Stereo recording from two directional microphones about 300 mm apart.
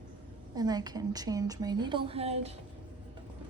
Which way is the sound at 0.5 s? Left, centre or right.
Centre.